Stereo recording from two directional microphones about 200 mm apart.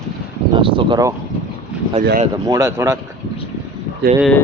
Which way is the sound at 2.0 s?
50° right (ahead or behind).